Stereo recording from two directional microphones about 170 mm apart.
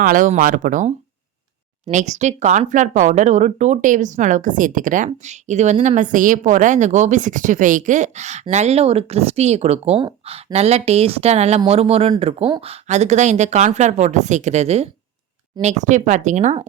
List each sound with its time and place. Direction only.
0.0 s speech: 50° right (ahead or behind)